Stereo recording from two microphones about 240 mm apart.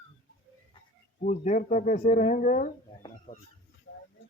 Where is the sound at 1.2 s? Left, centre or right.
Left.